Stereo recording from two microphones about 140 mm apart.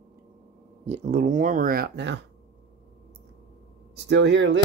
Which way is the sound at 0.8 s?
55° right (ahead or behind).